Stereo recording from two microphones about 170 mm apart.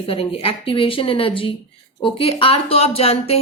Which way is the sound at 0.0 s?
35° left (ahead or behind).